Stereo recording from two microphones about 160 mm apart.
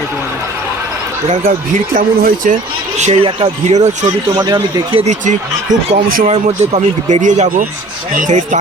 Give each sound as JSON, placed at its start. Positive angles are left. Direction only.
{"t": 1.3, "sound": "speech", "side_deg": -60}
{"t": 3.0, "sound": "speech", "side_deg": -45}
{"t": 4.4, "sound": "speech", "side_deg": -25}
{"t": 5.0, "sound": "speech", "side_deg": -50}